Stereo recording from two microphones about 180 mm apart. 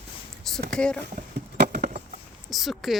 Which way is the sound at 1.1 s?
50° right (ahead or behind).